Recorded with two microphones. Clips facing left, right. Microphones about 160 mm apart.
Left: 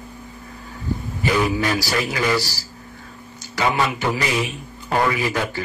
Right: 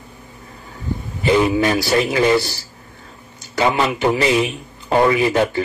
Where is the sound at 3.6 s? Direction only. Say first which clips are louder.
Right 4 dB; 25° right (ahead or behind).